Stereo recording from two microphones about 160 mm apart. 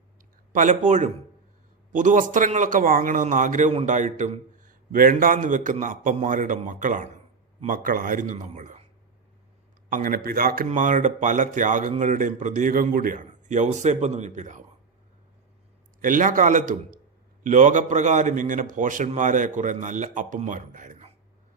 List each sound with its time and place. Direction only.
0.5 s a man's voice: 50° right (ahead or behind)
9.9 s a man's voice: 60° right (ahead or behind)
10.7 s speech: 50° right (ahead or behind)
16.0 s speech: 55° right (ahead or behind)